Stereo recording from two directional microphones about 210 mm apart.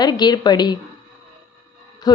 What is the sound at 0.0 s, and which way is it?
Speech, 20° left (ahead or behind).